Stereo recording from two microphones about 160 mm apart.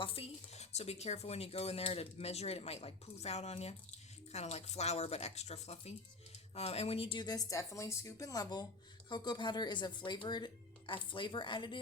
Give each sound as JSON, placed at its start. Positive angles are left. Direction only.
{"t": 0.0, "sound": "speech", "side_deg": 35}